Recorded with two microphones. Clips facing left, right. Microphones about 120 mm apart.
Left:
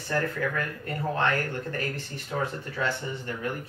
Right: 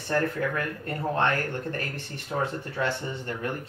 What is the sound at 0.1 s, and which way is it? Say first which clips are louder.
Speech: right 2 dB; 25° right (ahead or behind).